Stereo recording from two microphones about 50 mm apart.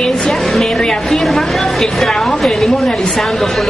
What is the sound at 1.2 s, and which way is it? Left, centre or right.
A woman's voice, centre.